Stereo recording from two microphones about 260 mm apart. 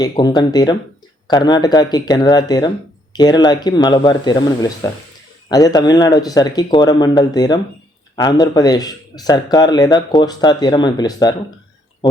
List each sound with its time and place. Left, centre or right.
0.0 s speech: centre